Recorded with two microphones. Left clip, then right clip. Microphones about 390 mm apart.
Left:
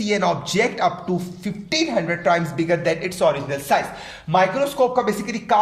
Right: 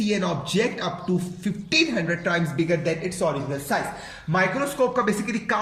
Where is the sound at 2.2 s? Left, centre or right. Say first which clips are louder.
Left 5 dB; centre.